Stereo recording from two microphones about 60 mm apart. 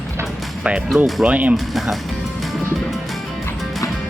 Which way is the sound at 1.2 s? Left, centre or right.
Right.